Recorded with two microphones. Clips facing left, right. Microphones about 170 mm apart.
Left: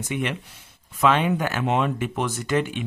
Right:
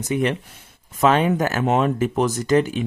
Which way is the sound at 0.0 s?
40° right (ahead or behind).